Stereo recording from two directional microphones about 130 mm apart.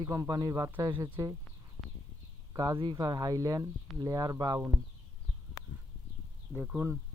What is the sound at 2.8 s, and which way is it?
Speech, 35° right (ahead or behind).